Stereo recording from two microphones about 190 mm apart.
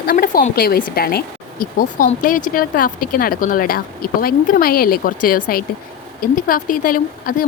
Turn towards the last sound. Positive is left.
turn(degrees=50)  # may be behind; listen again after turning